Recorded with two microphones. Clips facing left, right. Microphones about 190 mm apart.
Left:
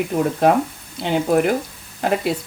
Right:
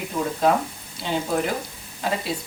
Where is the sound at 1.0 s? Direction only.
60° left (ahead or behind).